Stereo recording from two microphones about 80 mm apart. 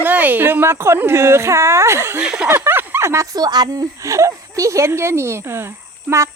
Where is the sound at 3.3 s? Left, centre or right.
Right.